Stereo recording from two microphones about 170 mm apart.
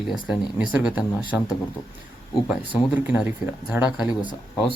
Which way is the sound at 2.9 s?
10° right (ahead or behind).